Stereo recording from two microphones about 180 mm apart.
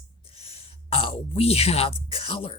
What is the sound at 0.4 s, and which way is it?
Speech, 30° left (ahead or behind).